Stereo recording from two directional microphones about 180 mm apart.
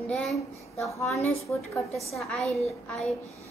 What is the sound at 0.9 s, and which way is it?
Speech, 15° left (ahead or behind).